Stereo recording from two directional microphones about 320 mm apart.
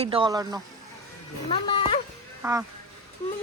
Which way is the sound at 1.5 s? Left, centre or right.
Centre.